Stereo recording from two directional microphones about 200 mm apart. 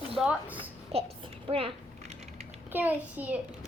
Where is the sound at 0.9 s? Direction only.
30° right (ahead or behind).